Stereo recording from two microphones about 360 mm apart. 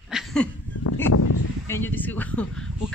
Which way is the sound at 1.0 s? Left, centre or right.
Left.